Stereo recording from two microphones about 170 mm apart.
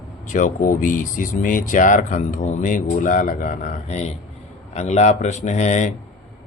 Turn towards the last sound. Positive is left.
turn(degrees=45)  # may be behind; listen again after turning